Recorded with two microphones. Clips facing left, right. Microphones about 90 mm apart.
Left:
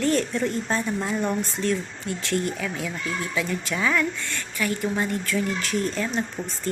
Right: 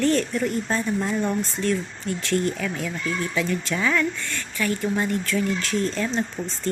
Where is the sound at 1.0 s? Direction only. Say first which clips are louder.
Right 1 dB; 10° left (ahead or behind).